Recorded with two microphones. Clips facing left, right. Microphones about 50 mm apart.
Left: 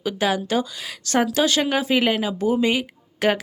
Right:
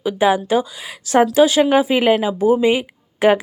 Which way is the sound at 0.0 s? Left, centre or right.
Centre.